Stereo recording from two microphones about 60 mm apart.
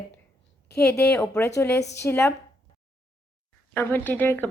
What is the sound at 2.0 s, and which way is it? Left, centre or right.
Speech, left.